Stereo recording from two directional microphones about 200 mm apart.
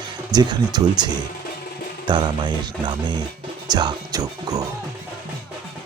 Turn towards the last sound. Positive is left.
turn(degrees=-20)  # may be behind; listen again after turning